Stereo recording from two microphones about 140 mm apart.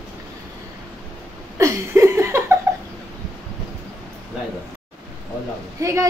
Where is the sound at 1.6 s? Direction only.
20° right (ahead or behind).